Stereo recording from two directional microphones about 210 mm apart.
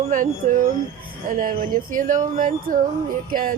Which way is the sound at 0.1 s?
40° right (ahead or behind).